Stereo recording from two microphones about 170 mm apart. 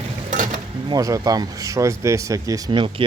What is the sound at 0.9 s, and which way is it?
Speech, 20° right (ahead or behind).